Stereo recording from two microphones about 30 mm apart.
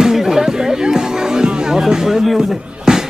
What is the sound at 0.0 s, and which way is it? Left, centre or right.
Music, centre.